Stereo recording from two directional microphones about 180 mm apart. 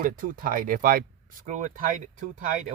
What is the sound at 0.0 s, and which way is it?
Speech, 50° right (ahead or behind).